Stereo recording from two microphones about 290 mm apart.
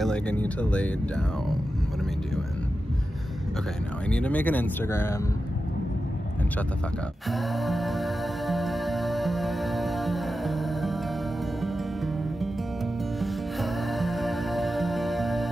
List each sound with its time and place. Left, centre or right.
0.0 s speech: centre
4.1 s speech: centre
7.2 s music: centre
13.2 s music: centre